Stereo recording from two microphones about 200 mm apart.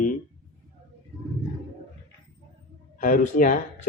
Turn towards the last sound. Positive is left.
turn(degrees=40)  # may be behind; listen again after turning